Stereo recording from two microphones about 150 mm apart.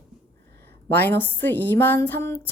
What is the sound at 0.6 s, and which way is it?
A woman's voice, 15° left (ahead or behind).